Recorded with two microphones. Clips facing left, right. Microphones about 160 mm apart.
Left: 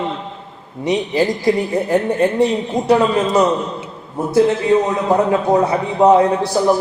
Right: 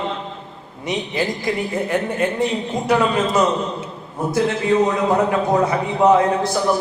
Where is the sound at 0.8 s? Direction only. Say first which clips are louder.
Left 6 dB; 35° left (ahead or behind).